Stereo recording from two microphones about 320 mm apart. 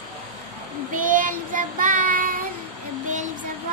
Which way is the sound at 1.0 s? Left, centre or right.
Right.